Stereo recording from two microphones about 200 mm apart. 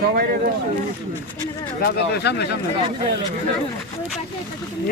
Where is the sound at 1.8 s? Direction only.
55° left (ahead or behind).